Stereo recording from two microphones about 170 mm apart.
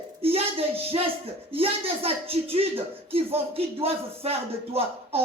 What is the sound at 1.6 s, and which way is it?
Speech, 35° right (ahead or behind).